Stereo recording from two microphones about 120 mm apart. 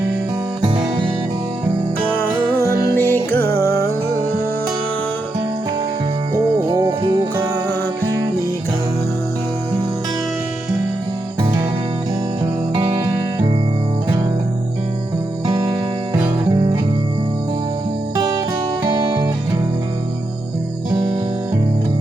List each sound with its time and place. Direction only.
2.9 s music: 15° left (ahead or behind)
6.3 s music: 35° right (ahead or behind)
12.7 s music: 30° right (ahead or behind)
18.9 s music: 35° right (ahead or behind)